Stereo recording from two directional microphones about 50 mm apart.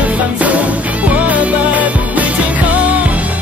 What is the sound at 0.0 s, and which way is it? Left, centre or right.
Music, right.